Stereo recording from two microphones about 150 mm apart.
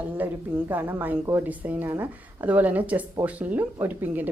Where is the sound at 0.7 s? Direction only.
10° right (ahead or behind).